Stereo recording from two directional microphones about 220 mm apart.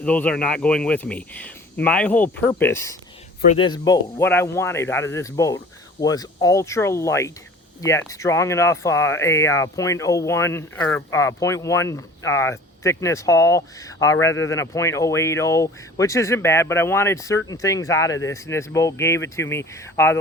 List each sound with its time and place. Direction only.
0.0 s speech: 5° left (ahead or behind)
3.4 s speech: 30° left (ahead or behind)
3.7 s speech: 15° left (ahead or behind)